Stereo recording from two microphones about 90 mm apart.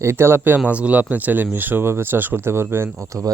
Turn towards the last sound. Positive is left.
turn(degrees=-35)  # may be behind; listen again after turning